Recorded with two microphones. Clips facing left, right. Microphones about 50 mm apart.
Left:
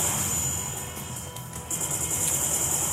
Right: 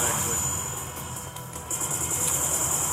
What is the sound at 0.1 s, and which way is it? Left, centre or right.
Vehicle, right.